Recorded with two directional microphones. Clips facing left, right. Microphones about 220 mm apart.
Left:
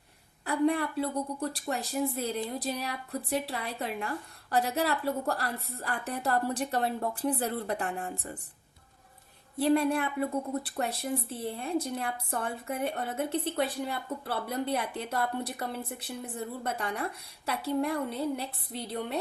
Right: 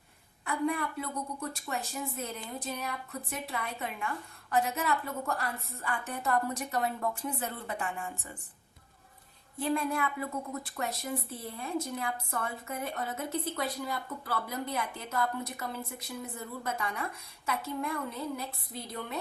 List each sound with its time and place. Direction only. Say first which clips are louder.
0.4 s a woman's voice: left 5 dB; 35° left (ahead or behind)
9.6 s a woman's voice: left 5 dB; 35° left (ahead or behind)